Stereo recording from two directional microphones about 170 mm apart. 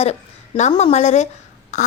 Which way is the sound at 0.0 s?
40° left (ahead or behind).